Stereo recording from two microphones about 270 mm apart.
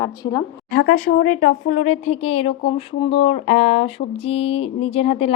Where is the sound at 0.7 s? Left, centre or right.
Left.